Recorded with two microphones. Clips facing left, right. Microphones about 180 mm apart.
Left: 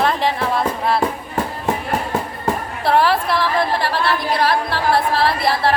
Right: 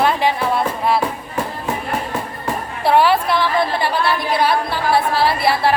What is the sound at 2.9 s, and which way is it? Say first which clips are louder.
Speech: right 2 dB; centre (ahead or behind).